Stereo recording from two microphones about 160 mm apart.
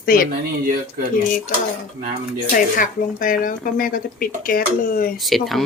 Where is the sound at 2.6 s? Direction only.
55° left (ahead or behind).